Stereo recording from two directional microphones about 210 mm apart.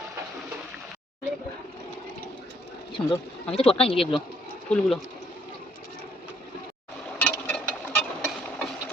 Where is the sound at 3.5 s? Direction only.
25° left (ahead or behind).